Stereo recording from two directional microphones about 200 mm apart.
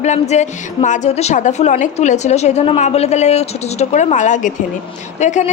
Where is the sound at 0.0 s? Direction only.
35° left (ahead or behind).